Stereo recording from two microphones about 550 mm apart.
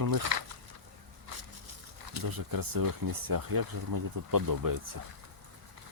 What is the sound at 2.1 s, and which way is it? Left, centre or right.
Speech, right.